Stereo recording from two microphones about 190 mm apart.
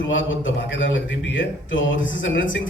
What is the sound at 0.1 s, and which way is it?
Speech, 80° left.